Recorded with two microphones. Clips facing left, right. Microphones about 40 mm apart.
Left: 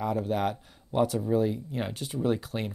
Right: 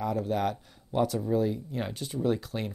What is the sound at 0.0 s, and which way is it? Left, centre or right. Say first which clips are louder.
Speech: left 1 dB; centre.